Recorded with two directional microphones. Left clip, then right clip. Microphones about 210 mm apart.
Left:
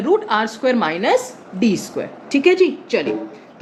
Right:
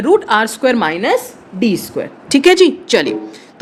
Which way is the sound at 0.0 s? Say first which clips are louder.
Right 5 dB; 40° right (ahead or behind).